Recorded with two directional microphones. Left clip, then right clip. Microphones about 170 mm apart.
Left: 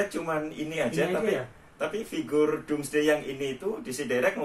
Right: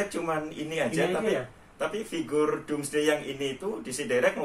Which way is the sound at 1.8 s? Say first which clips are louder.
Even; 15° right (ahead or behind).